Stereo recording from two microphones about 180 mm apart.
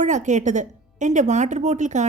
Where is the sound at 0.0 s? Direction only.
40° right (ahead or behind).